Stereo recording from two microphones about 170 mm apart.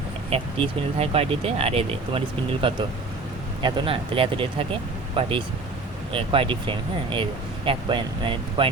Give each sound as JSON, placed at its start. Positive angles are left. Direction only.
{"t": 0.3, "sound": "speech", "side_deg": -35}
{"t": 6.1, "sound": "speech", "side_deg": -30}